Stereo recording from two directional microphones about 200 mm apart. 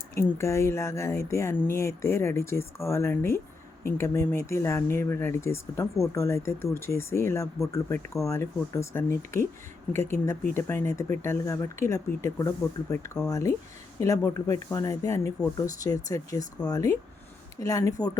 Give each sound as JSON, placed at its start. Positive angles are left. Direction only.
{"t": 0.2, "sound": "speech", "side_deg": 15}